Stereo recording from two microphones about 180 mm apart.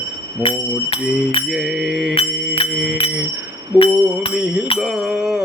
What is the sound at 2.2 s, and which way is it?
Music, 30° left (ahead or behind).